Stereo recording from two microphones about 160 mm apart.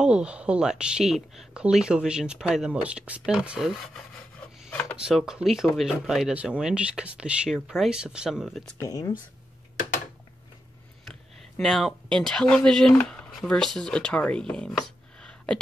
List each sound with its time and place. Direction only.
0.0 s speech: 5° right (ahead or behind)
4.6 s a sound: 10° left (ahead or behind)
4.9 s speech: 5° right (ahead or behind)
8.7 s speech: 20° left (ahead or behind)
11.1 s speech: centre (ahead or behind)